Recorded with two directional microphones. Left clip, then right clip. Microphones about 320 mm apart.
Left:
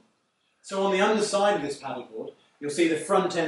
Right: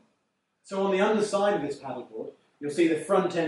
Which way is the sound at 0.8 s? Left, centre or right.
Centre.